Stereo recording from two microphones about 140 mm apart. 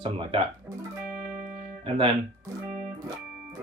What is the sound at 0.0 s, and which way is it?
Speech, 40° right (ahead or behind).